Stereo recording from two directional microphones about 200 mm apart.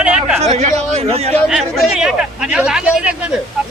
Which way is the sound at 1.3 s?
Centre (ahead or behind).